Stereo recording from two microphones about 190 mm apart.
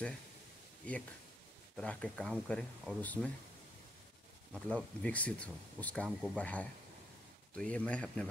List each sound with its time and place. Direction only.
1.8 s speech: 5° left (ahead or behind)
4.6 s speech: 5° right (ahead or behind)
5.0 s speech: 5° left (ahead or behind)